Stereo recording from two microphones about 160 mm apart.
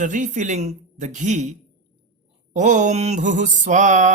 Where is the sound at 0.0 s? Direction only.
50° right (ahead or behind).